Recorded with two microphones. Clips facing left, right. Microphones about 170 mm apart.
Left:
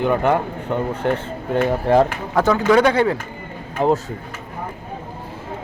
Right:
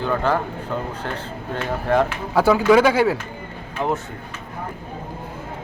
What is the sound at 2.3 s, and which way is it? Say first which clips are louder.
Speech: right 1 dB; 10° right (ahead or behind).